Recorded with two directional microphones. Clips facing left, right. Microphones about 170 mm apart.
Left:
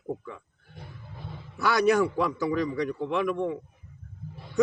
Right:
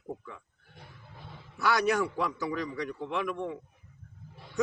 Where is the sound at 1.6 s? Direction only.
30° left (ahead or behind).